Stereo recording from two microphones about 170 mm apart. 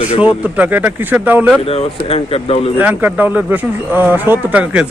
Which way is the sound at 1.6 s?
35° left (ahead or behind).